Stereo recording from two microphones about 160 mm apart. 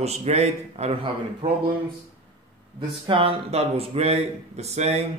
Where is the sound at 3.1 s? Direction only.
35° right (ahead or behind).